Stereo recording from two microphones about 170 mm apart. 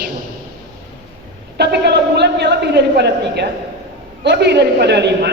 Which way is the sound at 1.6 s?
80° right.